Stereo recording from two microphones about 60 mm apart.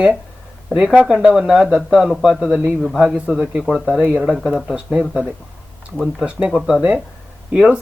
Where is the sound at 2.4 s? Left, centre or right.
Centre.